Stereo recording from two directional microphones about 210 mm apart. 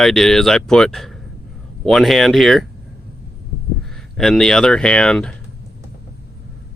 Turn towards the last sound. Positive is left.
turn(degrees=5)  # may be behind; listen again after turning